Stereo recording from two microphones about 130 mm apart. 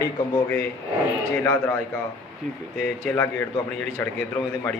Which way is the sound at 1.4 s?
20° left (ahead or behind).